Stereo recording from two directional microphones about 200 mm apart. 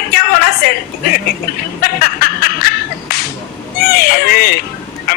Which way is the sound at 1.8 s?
50° left (ahead or behind).